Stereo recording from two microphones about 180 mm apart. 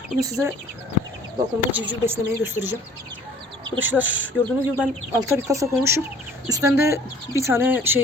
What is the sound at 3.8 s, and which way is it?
Speech, 10° right (ahead or behind).